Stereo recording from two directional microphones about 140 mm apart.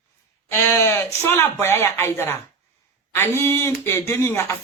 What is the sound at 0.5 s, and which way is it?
A man's voice, 15° left (ahead or behind).